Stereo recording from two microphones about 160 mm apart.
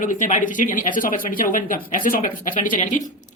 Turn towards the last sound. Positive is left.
turn(degrees=50)  # may be behind; listen again after turning